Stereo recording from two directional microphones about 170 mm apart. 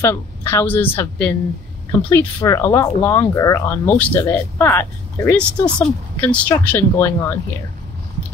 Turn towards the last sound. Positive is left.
turn(degrees=10)  # may be behind; listen again after turning